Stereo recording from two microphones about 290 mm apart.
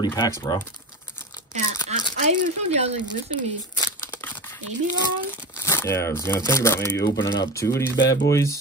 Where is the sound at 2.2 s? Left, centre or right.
Right.